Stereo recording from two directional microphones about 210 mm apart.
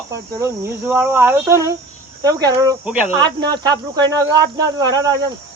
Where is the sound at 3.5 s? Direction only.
20° right (ahead or behind).